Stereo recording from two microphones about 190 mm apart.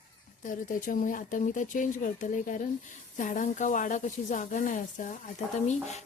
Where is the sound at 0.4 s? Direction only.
45° left (ahead or behind).